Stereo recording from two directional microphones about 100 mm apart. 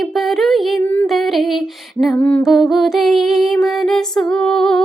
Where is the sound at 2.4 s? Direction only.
Centre (ahead or behind).